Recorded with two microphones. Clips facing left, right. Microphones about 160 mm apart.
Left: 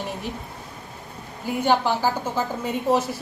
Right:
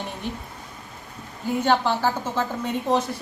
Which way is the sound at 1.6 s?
10° left (ahead or behind).